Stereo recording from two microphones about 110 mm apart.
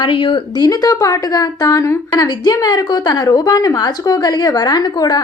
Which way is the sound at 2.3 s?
40° left (ahead or behind).